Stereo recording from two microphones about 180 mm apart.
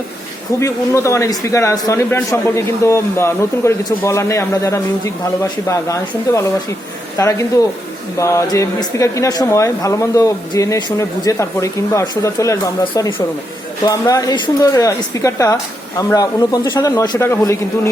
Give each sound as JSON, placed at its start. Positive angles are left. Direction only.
{"t": 0.6, "sound": "a man's voice", "side_deg": 15}